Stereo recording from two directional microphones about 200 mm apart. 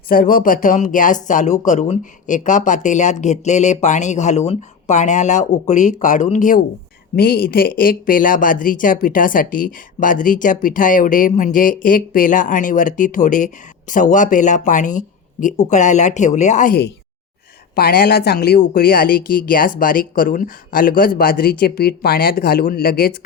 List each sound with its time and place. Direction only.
0.1 s speech: 45° left (ahead or behind)